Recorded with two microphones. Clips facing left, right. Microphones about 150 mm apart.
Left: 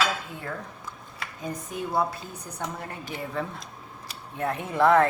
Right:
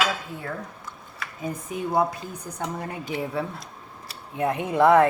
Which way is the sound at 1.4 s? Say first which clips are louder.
Right 3 dB; 10° right (ahead or behind).